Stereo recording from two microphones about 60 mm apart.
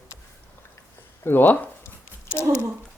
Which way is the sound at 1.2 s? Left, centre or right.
Left.